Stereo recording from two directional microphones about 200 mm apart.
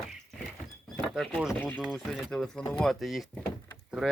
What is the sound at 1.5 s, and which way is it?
Speech, 5° left (ahead or behind).